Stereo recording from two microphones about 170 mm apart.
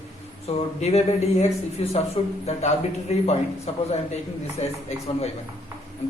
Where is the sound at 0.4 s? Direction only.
40° left (ahead or behind).